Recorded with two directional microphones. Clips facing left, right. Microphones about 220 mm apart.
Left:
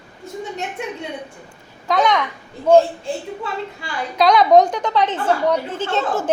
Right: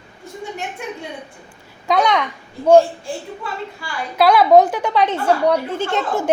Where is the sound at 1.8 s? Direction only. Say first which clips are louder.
Right 1 dB; 15° right (ahead or behind).